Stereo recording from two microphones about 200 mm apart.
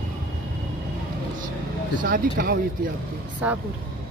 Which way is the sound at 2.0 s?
45° right (ahead or behind).